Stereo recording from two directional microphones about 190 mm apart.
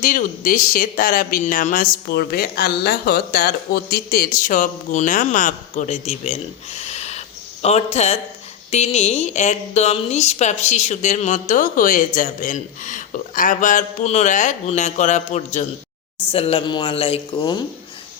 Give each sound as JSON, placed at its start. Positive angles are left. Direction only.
{"t": 0.0, "sound": "speech", "side_deg": 45}